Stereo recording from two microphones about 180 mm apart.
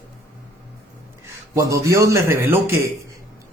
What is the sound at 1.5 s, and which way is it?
Speech, 15° right (ahead or behind).